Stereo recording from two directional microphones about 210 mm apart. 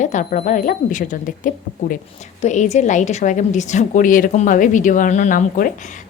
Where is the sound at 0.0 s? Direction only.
35° left (ahead or behind).